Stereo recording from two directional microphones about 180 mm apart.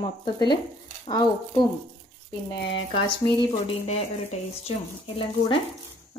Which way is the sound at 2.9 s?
30° left (ahead or behind).